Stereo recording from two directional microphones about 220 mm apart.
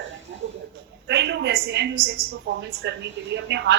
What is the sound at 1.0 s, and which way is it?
A woman's voice, 50° right (ahead or behind).